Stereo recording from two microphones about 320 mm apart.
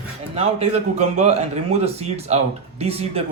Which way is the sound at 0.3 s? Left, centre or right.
Centre.